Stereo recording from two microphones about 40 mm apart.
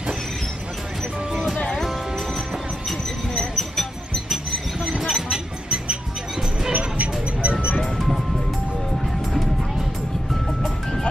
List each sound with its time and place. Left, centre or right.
1.3 s music: centre
3.3 s music: centre
5.0 s a sound: centre
6.7 s music: right
7.8 s music: centre
9.3 s music: centre
10.6 s music: centre